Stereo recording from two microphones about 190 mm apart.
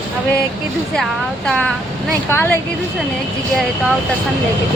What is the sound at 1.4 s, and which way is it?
Speech, 5° left (ahead or behind).